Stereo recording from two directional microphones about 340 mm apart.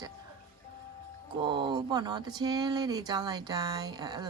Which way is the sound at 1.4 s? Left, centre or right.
Centre.